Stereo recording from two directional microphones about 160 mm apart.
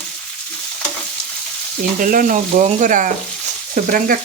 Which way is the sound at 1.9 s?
55° right (ahead or behind).